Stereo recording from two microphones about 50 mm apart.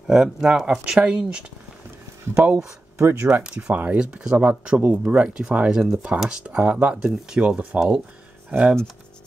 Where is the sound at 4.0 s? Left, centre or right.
Centre.